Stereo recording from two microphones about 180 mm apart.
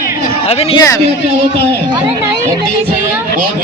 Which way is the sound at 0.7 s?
20° left (ahead or behind).